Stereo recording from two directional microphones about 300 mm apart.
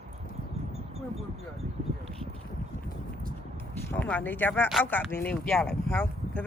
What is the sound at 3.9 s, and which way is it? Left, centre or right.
Speech, centre.